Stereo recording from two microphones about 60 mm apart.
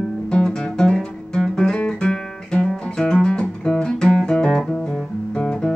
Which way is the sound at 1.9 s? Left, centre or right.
Centre.